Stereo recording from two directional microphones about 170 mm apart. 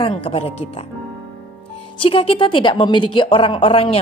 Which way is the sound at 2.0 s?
30° left (ahead or behind).